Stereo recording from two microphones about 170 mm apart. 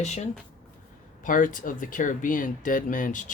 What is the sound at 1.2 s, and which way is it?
Speech, 50° left (ahead or behind).